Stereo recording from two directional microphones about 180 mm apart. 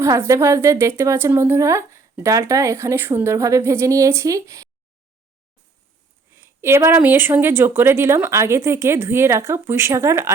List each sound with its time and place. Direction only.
0.0 s speech: 15° right (ahead or behind)
6.3 s speech: 15° right (ahead or behind)